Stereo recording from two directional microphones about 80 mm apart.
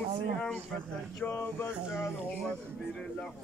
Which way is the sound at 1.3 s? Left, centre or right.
Left.